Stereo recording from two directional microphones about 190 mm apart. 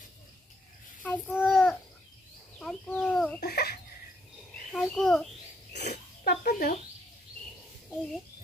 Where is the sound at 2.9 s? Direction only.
5° left (ahead or behind).